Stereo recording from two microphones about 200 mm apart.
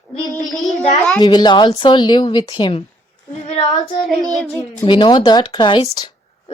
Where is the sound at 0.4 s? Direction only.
Centre (ahead or behind).